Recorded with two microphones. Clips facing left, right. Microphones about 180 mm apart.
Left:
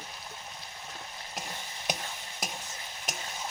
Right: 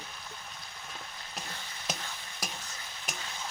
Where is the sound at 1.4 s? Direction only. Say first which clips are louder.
Left 3 dB; 15° left (ahead or behind).